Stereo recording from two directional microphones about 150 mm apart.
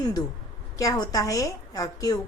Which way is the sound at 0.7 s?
20° left (ahead or behind).